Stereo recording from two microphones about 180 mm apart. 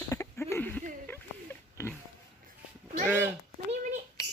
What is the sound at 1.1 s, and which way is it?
Oink, 15° left (ahead or behind).